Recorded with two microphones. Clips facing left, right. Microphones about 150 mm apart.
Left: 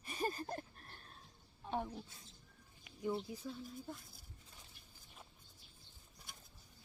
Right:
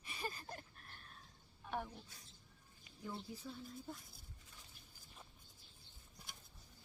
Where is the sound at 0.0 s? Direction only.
40° left (ahead or behind).